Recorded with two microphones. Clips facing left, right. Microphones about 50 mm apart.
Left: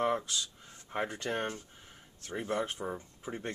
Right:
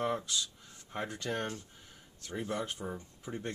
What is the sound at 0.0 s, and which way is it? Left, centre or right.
Speech, centre.